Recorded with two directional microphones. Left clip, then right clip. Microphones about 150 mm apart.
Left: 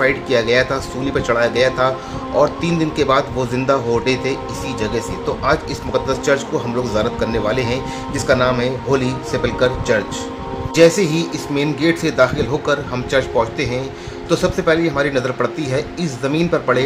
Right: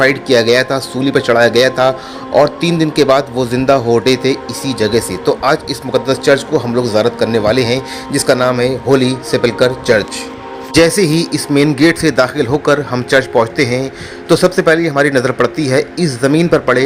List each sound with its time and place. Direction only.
0.0 s a man's voice: 45° right (ahead or behind)
10.8 s a man's voice: 60° right (ahead or behind)